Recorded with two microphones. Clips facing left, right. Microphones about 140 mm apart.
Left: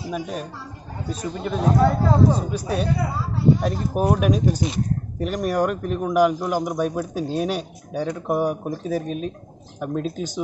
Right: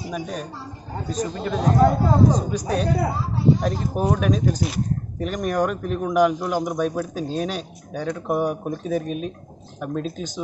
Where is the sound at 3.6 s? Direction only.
5° left (ahead or behind).